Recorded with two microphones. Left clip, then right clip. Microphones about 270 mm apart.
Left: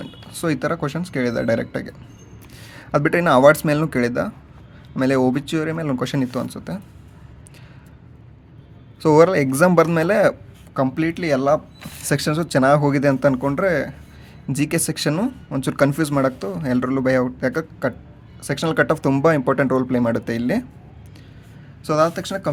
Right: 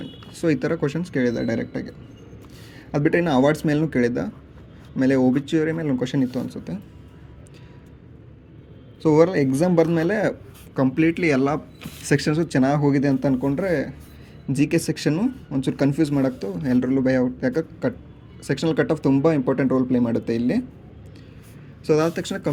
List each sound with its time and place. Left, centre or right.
0.0 s speech: centre
9.0 s speech: left
21.8 s speech: centre